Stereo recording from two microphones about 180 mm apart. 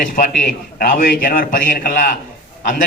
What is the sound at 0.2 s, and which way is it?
A man's voice, 55° left (ahead or behind).